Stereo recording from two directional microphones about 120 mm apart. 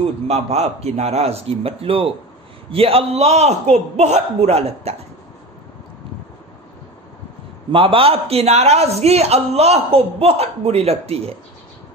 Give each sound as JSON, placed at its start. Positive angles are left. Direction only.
{"t": 0.0, "sound": "a man's voice", "side_deg": -65}
{"t": 7.7, "sound": "a man's voice", "side_deg": -50}